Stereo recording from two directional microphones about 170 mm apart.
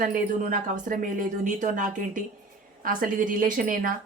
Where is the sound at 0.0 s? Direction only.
55° right (ahead or behind).